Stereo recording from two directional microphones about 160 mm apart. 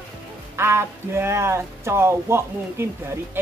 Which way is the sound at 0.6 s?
15° right (ahead or behind).